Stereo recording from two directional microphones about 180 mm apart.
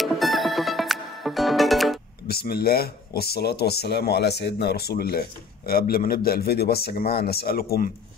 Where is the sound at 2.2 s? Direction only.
60° left (ahead or behind).